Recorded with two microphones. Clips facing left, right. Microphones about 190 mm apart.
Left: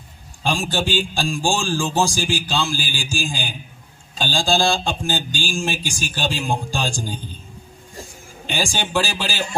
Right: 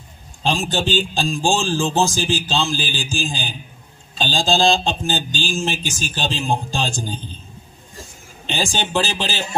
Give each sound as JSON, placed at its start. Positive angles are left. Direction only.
{"t": 0.4, "sound": "speech", "side_deg": -20}
{"t": 5.3, "sound": "a sound", "side_deg": 10}
{"t": 5.5, "sound": "speech", "side_deg": -20}
{"t": 8.4, "sound": "speech", "side_deg": -20}